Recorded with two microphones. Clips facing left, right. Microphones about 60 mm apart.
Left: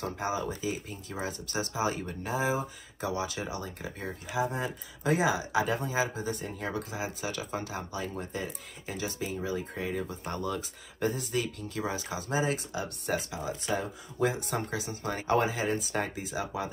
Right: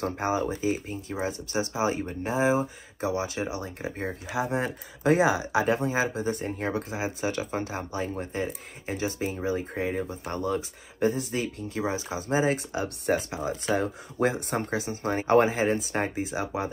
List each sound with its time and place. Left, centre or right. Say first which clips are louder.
0.0 s speech: right 5 dB; right
4.0 s speech: right 1 dB; right
4.5 s speech: right 5 dB; right